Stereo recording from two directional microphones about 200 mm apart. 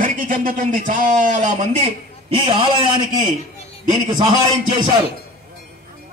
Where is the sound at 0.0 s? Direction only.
40° right (ahead or behind); by 3.3 s 25° right (ahead or behind).